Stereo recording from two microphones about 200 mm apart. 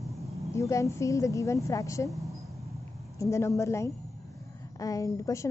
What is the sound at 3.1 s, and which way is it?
A woman's voice, 15° left (ahead or behind).